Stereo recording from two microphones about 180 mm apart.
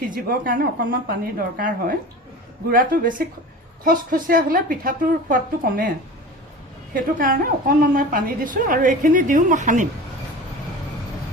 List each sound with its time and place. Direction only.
0.1 s a woman's voice: 50° right (ahead or behind)
6.9 s a woman's voice: 50° right (ahead or behind)